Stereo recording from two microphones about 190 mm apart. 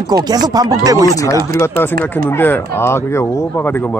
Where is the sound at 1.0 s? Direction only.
15° left (ahead or behind).